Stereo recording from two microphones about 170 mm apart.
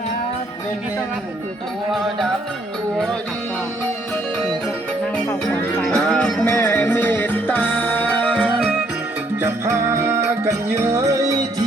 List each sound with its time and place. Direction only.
5.1 s music: 15° left (ahead or behind)
9.4 s music: 15° right (ahead or behind)